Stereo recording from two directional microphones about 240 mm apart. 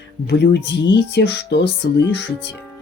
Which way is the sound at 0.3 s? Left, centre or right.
Left.